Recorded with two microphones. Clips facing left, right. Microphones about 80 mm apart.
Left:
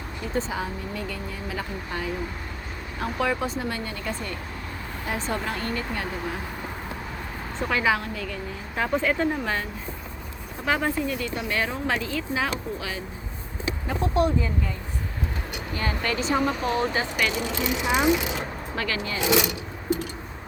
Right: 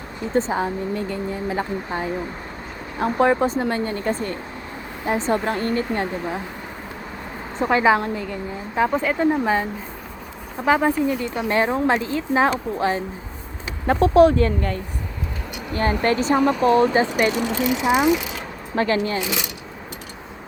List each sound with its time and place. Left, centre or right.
0.3 s speech: right
7.6 s a woman's voice: right
10.7 s speech: centre; by 13.0 s right
13.8 s speech: right
15.7 s speech: right
16.9 s speech: right
18.8 s speech: right